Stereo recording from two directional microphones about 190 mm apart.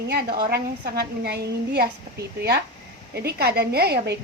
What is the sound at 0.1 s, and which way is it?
A woman's voice, 55° right (ahead or behind).